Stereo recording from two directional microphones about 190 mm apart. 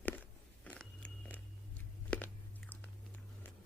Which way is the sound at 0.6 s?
5° left (ahead or behind).